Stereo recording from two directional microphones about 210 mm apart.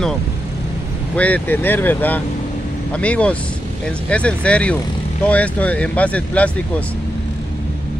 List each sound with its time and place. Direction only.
1.1 s speech: 5° left (ahead or behind)